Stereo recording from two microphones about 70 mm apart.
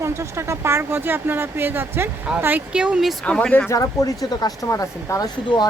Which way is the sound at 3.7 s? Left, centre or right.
Left.